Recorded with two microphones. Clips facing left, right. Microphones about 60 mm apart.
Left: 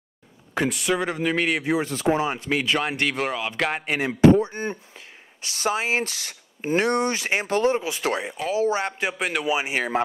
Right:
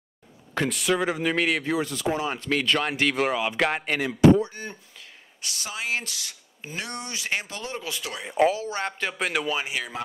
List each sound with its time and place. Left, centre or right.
0.6 s speech: centre
1.6 s speech: centre
1.9 s speech: left
2.2 s speech: centre
4.0 s speech: left
5.6 s speech: left
8.4 s speech: right
8.7 s speech: centre
9.7 s speech: left